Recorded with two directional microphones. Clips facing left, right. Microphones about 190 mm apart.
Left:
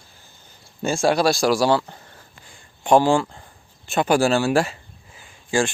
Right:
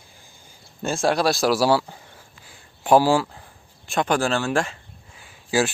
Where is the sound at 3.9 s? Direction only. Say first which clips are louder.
Left 4 dB; 5° left (ahead or behind).